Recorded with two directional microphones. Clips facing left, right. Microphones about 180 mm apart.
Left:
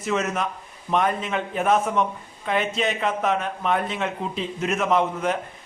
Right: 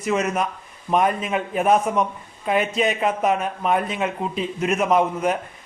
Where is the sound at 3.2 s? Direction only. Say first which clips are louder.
Right 3 dB; 10° right (ahead or behind).